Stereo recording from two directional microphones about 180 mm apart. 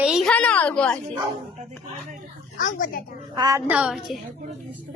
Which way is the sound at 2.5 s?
50° left (ahead or behind).